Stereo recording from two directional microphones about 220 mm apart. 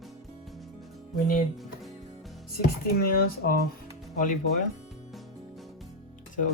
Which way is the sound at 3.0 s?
40° left (ahead or behind).